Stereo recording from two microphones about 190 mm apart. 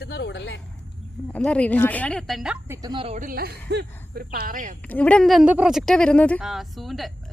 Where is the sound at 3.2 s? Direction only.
50° right (ahead or behind).